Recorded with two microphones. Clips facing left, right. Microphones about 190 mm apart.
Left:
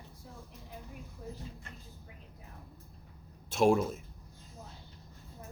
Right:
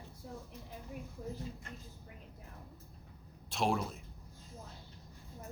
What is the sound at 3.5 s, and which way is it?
Speech, 50° left (ahead or behind).